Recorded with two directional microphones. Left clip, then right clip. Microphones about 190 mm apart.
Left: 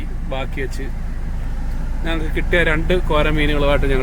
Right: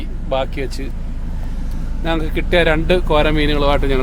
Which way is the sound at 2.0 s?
15° right (ahead or behind).